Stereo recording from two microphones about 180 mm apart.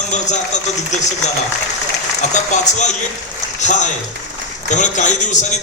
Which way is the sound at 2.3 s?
40° left (ahead or behind).